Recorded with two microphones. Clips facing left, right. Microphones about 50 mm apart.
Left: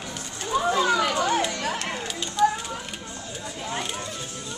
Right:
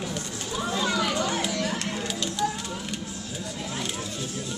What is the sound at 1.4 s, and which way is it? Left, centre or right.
Music, centre.